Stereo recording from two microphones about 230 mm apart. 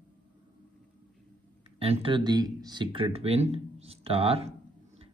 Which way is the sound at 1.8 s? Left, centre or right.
Right.